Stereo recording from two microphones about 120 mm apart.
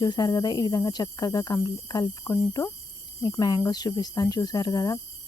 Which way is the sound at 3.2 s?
35° left (ahead or behind).